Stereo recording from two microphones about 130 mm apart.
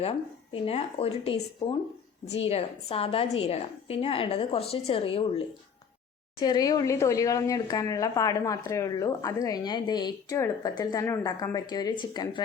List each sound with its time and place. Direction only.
0.0 s a woman's voice: 45° left (ahead or behind)
6.4 s speech: 30° left (ahead or behind)